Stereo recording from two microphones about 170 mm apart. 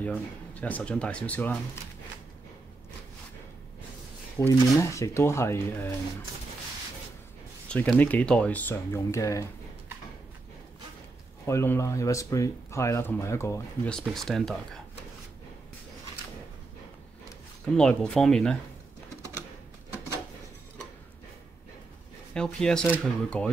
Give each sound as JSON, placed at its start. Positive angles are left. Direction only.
{"t": 0.0, "sound": "speech", "side_deg": 10}
{"t": 4.4, "sound": "speech", "side_deg": 15}
{"t": 7.6, "sound": "speech", "side_deg": 5}
{"t": 11.4, "sound": "speech", "side_deg": 15}
{"t": 13.8, "sound": "speech", "side_deg": 5}
{"t": 17.7, "sound": "speech", "side_deg": 5}
{"t": 22.3, "sound": "speech", "side_deg": 5}